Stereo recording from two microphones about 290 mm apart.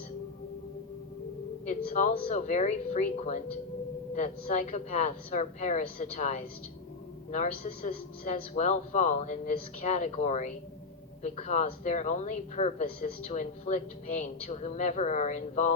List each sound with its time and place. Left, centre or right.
1.6 s speech: left